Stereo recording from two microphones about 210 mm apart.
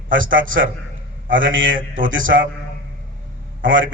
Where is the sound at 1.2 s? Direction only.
65° right (ahead or behind).